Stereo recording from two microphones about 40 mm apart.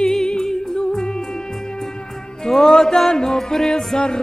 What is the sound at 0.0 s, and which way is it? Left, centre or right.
Music, centre.